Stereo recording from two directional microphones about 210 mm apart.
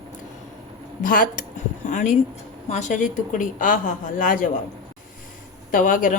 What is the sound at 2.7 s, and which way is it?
A woman's voice, 35° left (ahead or behind).